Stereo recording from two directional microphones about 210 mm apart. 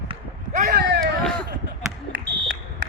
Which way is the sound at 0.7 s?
50° right (ahead or behind).